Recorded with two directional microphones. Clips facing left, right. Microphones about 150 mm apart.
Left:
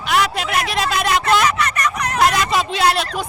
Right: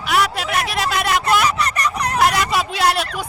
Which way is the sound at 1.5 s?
35° right (ahead or behind).